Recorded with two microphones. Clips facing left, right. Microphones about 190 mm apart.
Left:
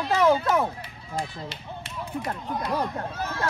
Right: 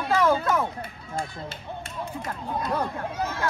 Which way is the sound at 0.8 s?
50° right (ahead or behind).